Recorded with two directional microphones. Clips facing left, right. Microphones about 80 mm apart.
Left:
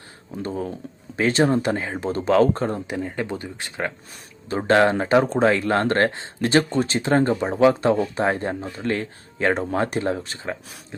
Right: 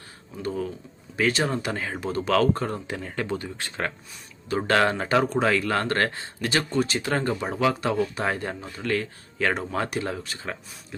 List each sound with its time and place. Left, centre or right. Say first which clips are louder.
0.4 s speech: left 1 dB; left
2.9 s speech: left 3 dB; centre